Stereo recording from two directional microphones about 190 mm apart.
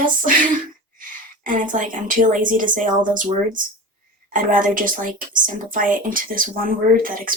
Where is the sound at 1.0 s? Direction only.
45° right (ahead or behind).